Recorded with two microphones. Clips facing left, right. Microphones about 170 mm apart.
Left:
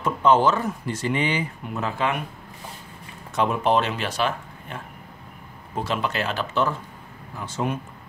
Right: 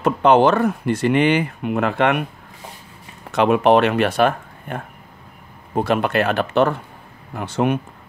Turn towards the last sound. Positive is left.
turn(degrees=-65)  # may be behind; listen again after turning